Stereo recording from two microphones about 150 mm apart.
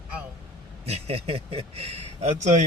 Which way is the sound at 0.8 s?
45° right (ahead or behind).